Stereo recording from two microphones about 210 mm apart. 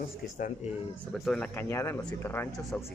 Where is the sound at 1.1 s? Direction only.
Centre (ahead or behind).